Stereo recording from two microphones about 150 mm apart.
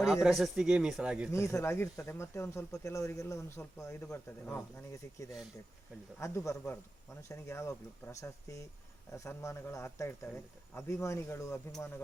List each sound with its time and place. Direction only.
0.1 s speech: centre (ahead or behind)
1.3 s speech: 20° left (ahead or behind)